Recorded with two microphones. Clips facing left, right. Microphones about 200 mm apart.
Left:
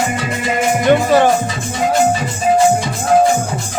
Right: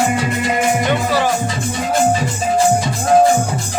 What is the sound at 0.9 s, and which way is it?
Music, 50° left (ahead or behind).